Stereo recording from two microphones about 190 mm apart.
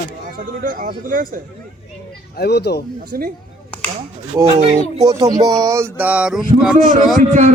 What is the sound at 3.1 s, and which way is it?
Speech, 50° right (ahead or behind).